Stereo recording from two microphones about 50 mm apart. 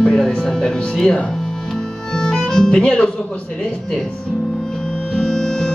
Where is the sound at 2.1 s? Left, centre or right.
Centre.